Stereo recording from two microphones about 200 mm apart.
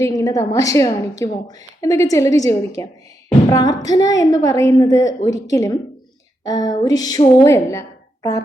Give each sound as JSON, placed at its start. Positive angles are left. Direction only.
{"t": 0.0, "sound": "a woman's voice", "side_deg": 15}